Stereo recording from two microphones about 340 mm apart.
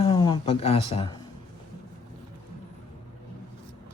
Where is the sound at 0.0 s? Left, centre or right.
Centre.